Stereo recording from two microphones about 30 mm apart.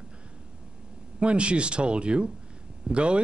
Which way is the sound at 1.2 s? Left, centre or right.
Right.